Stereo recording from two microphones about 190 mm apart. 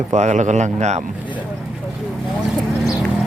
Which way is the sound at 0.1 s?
40° right (ahead or behind).